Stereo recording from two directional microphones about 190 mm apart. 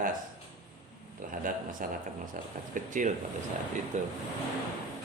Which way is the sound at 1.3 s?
45° right (ahead or behind).